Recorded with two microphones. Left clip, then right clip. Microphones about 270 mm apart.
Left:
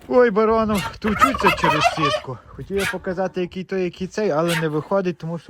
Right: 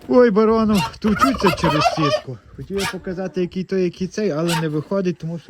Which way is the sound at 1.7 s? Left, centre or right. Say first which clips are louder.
Right 1 dB; left.